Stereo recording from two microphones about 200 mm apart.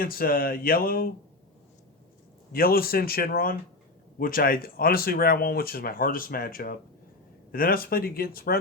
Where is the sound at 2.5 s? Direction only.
45° left (ahead or behind).